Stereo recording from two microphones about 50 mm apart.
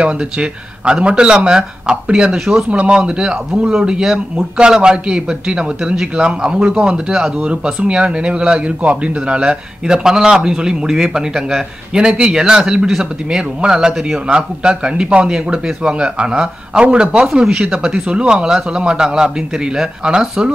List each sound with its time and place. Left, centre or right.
0.0 s a man's voice: right
4.4 s a man's voice: centre